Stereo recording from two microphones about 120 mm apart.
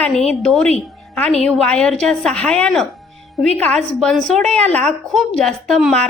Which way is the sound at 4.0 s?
Centre (ahead or behind).